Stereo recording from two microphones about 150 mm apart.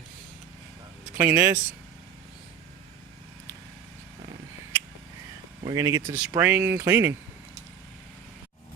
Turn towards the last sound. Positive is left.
turn(degrees=-15)  # may be behind; listen again after turning